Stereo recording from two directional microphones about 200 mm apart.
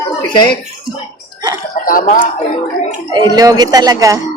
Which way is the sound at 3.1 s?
20° right (ahead or behind).